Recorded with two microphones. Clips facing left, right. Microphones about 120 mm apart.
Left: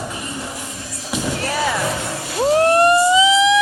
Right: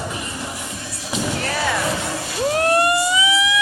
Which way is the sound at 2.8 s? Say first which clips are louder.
Left 6 dB; 30° left (ahead or behind).